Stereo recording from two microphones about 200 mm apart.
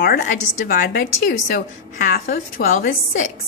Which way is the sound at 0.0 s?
50° left (ahead or behind).